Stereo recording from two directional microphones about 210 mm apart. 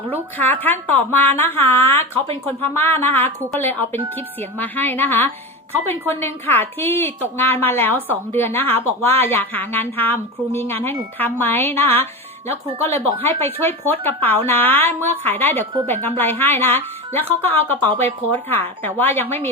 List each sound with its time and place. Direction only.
0.1 s a woman's voice: 10° left (ahead or behind)
2.1 s speech: 25° right (ahead or behind)
2.6 s a woman's voice: 10° left (ahead or behind)
13.2 s a woman's voice: 10° left (ahead or behind)